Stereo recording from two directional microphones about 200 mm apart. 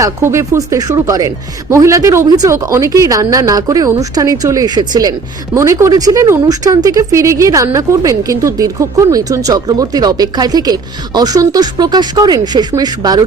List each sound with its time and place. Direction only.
0.0 s speech: 15° right (ahead or behind)